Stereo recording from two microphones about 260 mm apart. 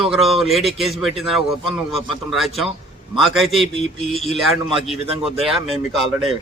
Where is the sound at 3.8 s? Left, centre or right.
Left.